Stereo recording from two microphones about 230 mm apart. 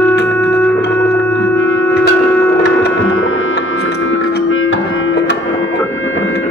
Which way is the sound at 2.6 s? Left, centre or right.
Left.